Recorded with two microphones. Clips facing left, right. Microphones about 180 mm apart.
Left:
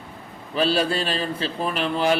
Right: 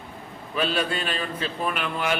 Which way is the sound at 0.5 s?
35° left (ahead or behind).